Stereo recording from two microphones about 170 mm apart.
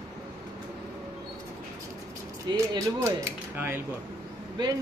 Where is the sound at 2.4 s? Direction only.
20° right (ahead or behind).